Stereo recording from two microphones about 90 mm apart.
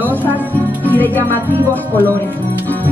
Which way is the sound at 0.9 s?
20° left (ahead or behind).